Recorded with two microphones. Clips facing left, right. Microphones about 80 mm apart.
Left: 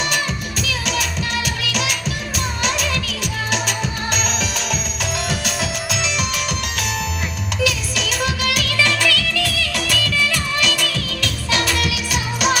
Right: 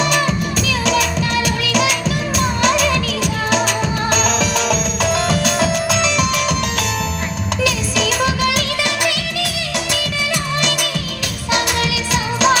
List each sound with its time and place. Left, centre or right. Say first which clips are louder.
1.6 s music: right 6 dB; right
5.3 s music: right 7 dB; right
7.6 s music: right 3 dB; right
8.8 s music: left 1 dB; centre